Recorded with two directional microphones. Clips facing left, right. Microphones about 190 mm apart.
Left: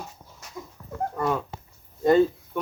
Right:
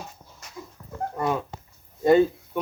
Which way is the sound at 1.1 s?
10° right (ahead or behind).